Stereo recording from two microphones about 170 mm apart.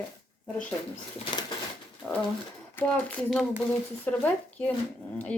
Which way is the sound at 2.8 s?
5° left (ahead or behind).